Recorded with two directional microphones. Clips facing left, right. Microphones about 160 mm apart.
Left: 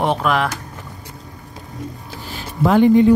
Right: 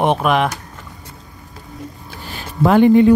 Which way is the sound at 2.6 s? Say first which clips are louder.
Right 2 dB; 60° right (ahead or behind).